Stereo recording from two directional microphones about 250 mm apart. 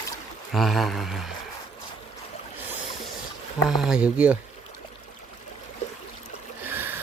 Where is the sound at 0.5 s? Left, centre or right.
Centre.